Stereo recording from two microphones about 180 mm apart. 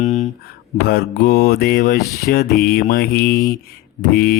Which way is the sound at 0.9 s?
60° left (ahead or behind).